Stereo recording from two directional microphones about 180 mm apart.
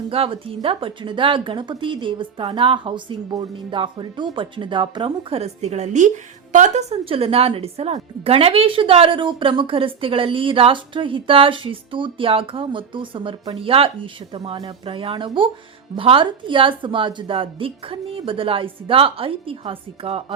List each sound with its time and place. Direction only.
0.1 s a woman's voice: 30° right (ahead or behind)